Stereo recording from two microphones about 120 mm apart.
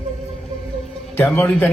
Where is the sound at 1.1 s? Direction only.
15° left (ahead or behind).